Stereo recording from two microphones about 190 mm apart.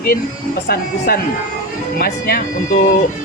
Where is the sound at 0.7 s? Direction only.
50° left (ahead or behind).